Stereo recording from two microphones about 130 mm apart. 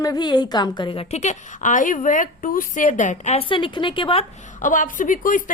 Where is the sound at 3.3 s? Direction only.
40° left (ahead or behind).